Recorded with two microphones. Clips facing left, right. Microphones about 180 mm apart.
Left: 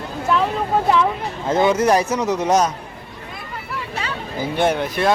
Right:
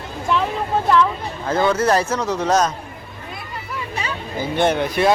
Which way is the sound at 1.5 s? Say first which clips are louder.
Left 2 dB; 20° left (ahead or behind).